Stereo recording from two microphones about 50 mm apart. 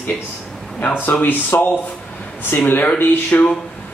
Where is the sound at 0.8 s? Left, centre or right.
Left.